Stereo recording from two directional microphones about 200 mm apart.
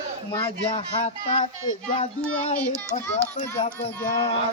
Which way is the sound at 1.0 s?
25° left (ahead or behind).